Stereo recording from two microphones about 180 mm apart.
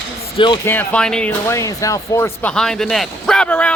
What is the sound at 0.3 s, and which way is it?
Speech, 25° left (ahead or behind).